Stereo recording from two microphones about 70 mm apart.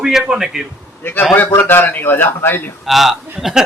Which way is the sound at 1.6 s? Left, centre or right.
Left.